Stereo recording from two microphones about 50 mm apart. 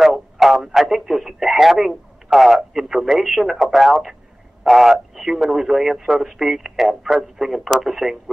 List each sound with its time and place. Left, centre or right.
0.0 s speech: centre